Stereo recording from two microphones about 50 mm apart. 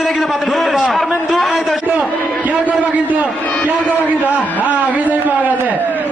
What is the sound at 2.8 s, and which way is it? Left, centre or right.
Speech, right.